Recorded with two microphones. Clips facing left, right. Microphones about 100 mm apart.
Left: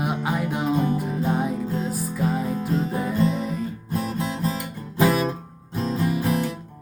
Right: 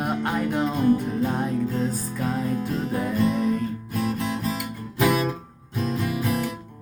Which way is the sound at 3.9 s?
30° left (ahead or behind).